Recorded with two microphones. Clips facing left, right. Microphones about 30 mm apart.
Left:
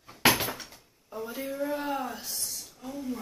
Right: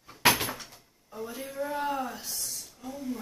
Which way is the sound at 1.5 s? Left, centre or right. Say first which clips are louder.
Right 1 dB; centre.